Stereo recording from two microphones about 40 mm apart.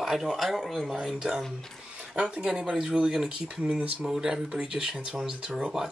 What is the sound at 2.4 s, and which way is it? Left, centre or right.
Speech, centre.